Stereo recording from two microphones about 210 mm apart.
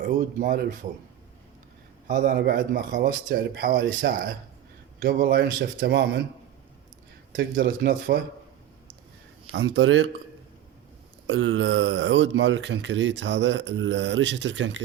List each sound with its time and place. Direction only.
0.0 s speech: 40° right (ahead or behind)
2.0 s speech: 40° right (ahead or behind)
7.5 s speech: 45° right (ahead or behind)
9.5 s speech: 70° right (ahead or behind)
11.3 s speech: 70° right (ahead or behind)